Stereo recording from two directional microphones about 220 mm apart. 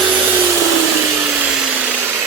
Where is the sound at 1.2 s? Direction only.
5° right (ahead or behind).